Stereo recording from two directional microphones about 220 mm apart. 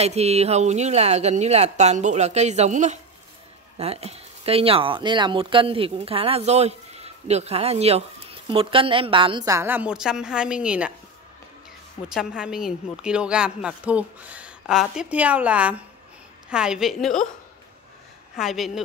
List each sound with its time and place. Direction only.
0.0 s speech: 30° right (ahead or behind); by 10.9 s 5° right (ahead or behind)
12.1 s a woman's voice: 5° right (ahead or behind)
18.3 s speech: centre (ahead or behind)